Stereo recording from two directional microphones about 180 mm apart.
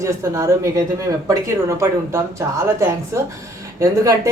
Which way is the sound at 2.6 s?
15° right (ahead or behind).